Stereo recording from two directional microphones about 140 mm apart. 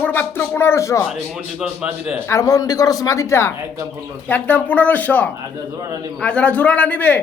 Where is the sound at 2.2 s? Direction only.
25° left (ahead or behind).